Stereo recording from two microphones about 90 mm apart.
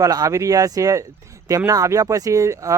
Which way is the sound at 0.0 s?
40° right (ahead or behind).